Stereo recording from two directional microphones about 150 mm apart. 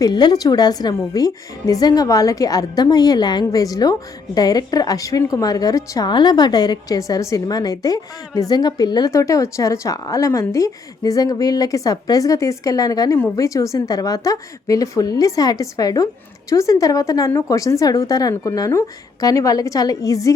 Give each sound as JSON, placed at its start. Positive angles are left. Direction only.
{"t": 0.0, "sound": "speech", "side_deg": 30}